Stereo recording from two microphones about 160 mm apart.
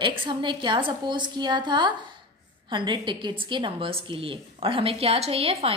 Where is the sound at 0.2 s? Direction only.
30° right (ahead or behind).